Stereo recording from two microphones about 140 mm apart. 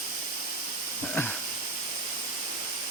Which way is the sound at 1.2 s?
15° left (ahead or behind).